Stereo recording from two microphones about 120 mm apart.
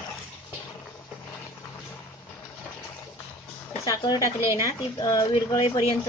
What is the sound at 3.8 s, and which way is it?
Speech, 30° left (ahead or behind).